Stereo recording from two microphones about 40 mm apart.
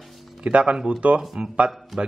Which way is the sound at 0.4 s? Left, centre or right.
Right.